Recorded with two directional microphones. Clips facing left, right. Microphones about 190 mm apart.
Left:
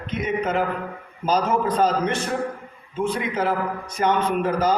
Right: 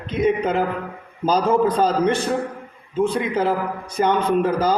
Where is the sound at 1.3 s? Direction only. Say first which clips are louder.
Right 4 dB; 30° right (ahead or behind).